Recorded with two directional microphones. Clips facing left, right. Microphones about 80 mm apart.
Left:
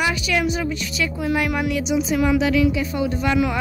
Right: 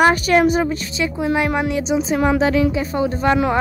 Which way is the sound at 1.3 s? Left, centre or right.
Right.